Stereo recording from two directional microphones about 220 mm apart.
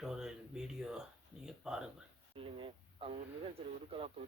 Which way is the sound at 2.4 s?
25° right (ahead or behind).